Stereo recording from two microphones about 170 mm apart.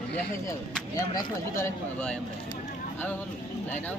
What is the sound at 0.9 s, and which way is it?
Speech, 20° left (ahead or behind).